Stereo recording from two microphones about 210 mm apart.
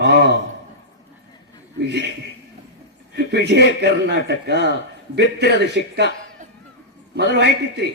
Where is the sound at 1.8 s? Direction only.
55° right (ahead or behind).